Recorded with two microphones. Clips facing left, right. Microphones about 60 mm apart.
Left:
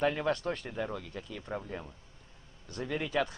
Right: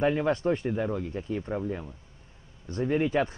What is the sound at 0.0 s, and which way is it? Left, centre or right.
Speech, centre.